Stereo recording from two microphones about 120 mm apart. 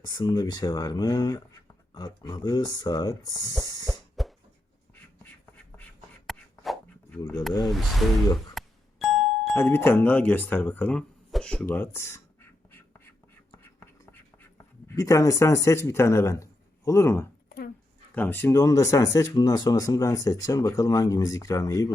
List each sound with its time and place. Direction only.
0.1 s speech: 35° left (ahead or behind)
3.8 s cough: centre (ahead or behind)
6.2 s a sound: centre (ahead or behind)
7.6 s speech: centre (ahead or behind)
8.4 s doorbell: centre (ahead or behind)
9.6 s speech: 20° left (ahead or behind)
11.3 s a sound: 5° left (ahead or behind)
11.6 s speech: 20° left (ahead or behind)
13.6 s whispering: 20° left (ahead or behind)
14.6 s speech: 25° left (ahead or behind)